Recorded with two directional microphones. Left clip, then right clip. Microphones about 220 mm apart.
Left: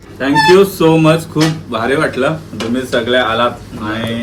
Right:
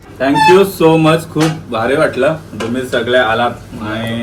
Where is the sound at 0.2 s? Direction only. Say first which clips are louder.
Even; centre (ahead or behind).